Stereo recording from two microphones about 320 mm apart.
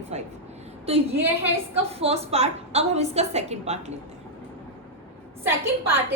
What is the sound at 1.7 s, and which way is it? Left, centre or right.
A woman's voice, centre.